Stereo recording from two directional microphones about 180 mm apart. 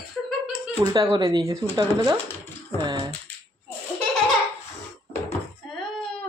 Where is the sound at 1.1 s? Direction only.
20° right (ahead or behind).